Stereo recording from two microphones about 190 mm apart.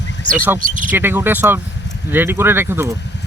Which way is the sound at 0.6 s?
45° right (ahead or behind).